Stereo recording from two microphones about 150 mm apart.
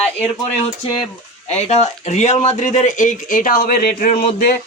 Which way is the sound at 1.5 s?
50° left (ahead or behind).